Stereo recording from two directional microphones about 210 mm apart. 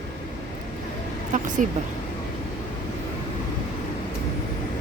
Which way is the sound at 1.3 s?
40° right (ahead or behind).